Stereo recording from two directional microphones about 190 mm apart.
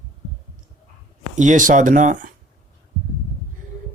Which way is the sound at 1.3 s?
40° right (ahead or behind).